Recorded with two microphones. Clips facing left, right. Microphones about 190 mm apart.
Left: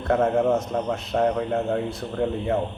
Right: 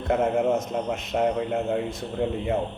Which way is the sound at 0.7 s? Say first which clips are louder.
Left 2 dB; 20° right (ahead or behind).